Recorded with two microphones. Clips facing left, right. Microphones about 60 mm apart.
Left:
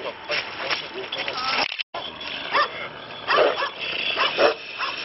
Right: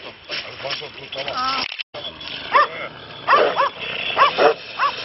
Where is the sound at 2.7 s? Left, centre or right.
Centre.